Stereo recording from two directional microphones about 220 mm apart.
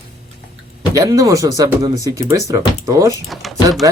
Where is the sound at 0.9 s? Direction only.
15° right (ahead or behind).